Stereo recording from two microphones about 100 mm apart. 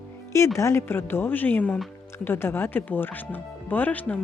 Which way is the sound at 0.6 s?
25° left (ahead or behind).